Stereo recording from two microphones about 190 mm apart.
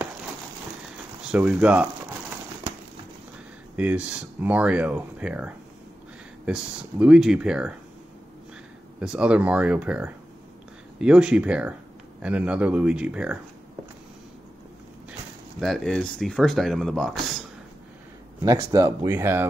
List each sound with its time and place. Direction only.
1.3 s speech: 5° right (ahead or behind)
3.7 s speech: 5° right (ahead or behind)
9.0 s speech: 5° right (ahead or behind)
15.6 s speech: centre (ahead or behind)
18.4 s speech: 20° right (ahead or behind)